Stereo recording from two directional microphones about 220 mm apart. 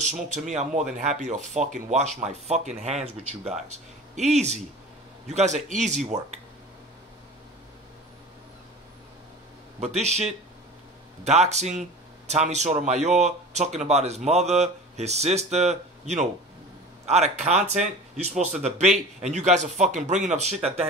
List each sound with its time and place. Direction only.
0.0 s speech: 30° right (ahead or behind)
9.8 s speech: 30° right (ahead or behind)